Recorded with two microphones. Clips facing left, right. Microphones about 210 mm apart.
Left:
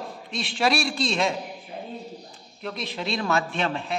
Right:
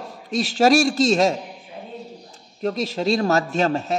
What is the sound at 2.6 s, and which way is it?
A man's voice, 40° right (ahead or behind).